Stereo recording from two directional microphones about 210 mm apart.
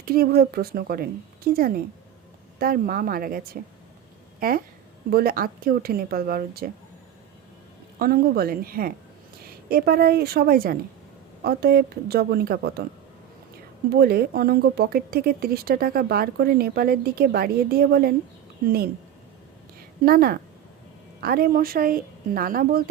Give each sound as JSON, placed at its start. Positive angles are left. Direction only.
{"t": 0.0, "sound": "speech", "side_deg": -45}
{"t": 7.9, "sound": "speech", "side_deg": -45}
{"t": 13.9, "sound": "speech", "side_deg": -50}
{"t": 20.0, "sound": "speech", "side_deg": -45}